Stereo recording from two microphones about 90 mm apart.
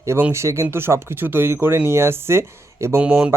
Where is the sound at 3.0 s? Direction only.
15° right (ahead or behind).